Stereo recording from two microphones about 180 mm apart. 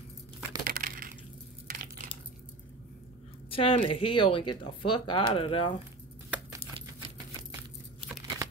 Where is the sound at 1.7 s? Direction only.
50° right (ahead or behind).